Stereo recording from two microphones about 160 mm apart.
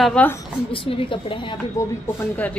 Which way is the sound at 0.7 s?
35° left (ahead or behind).